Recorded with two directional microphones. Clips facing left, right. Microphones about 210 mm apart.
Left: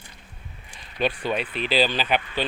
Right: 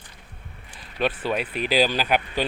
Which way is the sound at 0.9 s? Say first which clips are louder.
Even; 5° right (ahead or behind).